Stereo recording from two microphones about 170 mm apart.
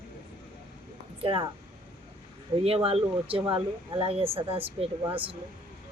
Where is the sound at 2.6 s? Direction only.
35° right (ahead or behind).